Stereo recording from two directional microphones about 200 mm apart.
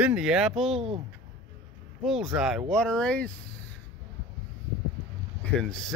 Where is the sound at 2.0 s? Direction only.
Centre (ahead or behind).